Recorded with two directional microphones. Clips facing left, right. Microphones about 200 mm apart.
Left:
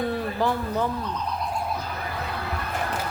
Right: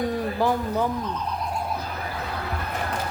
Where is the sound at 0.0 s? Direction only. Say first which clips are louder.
Right 1 dB; 15° right (ahead or behind).